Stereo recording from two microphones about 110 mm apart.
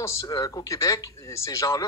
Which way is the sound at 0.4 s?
30° left (ahead or behind).